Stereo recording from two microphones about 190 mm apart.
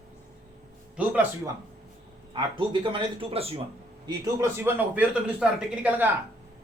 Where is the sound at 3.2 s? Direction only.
30° right (ahead or behind).